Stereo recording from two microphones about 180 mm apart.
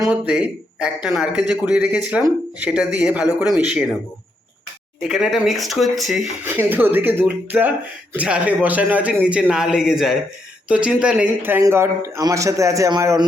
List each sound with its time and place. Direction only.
0.1 s a man's voice: 5° right (ahead or behind)
5.0 s a man's voice: centre (ahead or behind)
6.4 s a man's voice: 10° right (ahead or behind)